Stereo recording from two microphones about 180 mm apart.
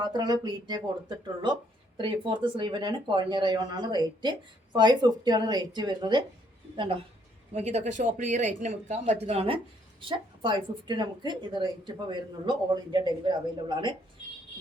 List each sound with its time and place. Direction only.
0.0 s speech: 25° right (ahead or behind)